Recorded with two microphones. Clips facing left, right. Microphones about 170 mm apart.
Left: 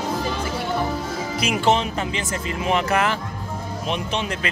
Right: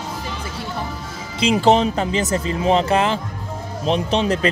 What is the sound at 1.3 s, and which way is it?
Speech, 30° right (ahead or behind).